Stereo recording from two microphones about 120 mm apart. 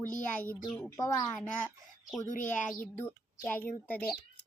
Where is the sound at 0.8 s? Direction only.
25° left (ahead or behind).